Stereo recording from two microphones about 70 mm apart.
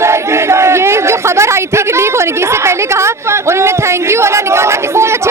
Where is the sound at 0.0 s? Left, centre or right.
Right.